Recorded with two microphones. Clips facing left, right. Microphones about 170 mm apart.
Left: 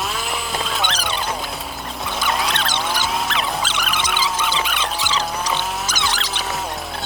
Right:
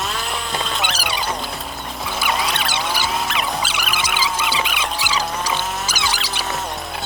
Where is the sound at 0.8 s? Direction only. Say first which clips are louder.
Even; 10° right (ahead or behind).